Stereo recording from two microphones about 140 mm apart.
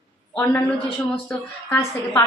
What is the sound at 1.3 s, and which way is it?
Speech, 15° left (ahead or behind).